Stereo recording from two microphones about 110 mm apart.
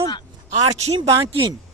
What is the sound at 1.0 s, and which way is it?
Speech, 45° right (ahead or behind).